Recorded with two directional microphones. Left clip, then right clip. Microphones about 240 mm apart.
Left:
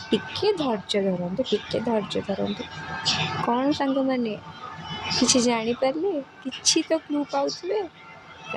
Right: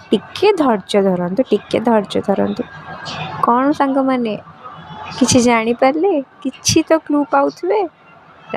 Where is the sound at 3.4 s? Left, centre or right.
Centre.